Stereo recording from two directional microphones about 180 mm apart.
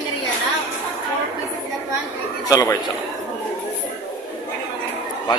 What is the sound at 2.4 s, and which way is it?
Speech, 20° left (ahead or behind).